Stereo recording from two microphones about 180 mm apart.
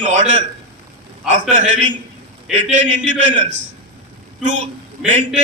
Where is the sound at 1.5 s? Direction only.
40° right (ahead or behind).